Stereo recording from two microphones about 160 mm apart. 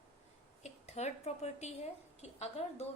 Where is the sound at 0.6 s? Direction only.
45° left (ahead or behind).